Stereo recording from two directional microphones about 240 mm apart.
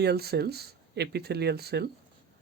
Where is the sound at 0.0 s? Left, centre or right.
Right.